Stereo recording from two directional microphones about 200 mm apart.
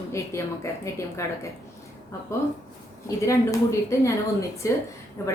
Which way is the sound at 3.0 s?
15° left (ahead or behind).